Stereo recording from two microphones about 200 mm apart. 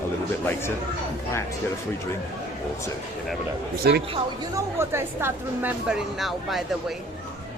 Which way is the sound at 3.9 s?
50° right (ahead or behind).